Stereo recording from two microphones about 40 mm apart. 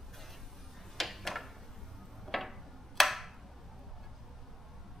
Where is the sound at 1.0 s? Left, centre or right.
Centre.